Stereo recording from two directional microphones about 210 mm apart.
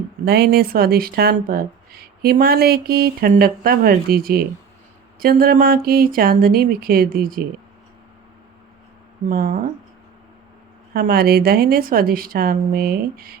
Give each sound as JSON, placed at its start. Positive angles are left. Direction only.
{"t": 0.3, "sound": "speech", "side_deg": -50}
{"t": 9.3, "sound": "speech", "side_deg": -40}
{"t": 10.9, "sound": "speech", "side_deg": -45}